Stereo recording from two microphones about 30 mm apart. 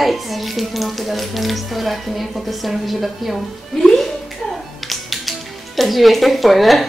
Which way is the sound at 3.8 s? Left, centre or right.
Left.